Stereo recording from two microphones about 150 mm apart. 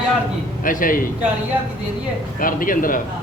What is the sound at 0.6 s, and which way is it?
Speech, 65° left (ahead or behind).